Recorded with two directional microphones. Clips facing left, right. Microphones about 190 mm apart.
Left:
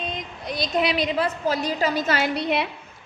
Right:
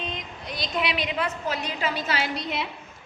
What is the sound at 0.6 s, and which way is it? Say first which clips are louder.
A woman's voice: left 5 dB; 40° left (ahead or behind).